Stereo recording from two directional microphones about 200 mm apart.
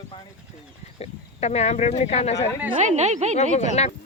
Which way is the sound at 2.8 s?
35° right (ahead or behind).